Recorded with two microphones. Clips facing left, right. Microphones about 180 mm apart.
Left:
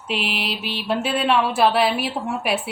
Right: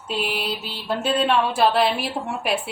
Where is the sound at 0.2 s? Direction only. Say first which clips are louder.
Right 1 dB; 80° left.